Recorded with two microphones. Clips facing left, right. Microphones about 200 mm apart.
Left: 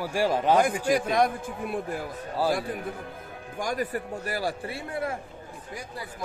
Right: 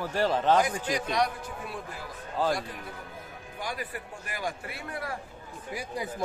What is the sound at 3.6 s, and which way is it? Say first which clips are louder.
A man's voice: left 7 dB; 45° left (ahead or behind).